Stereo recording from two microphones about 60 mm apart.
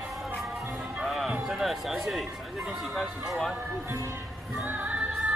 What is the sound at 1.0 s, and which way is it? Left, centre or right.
Music, centre.